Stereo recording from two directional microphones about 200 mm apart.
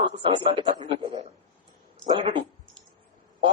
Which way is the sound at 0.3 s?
25° right (ahead or behind).